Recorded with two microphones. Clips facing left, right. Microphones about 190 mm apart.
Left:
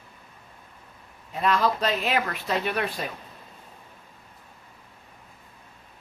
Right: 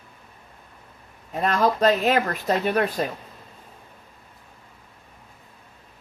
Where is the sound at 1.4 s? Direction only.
45° right (ahead or behind).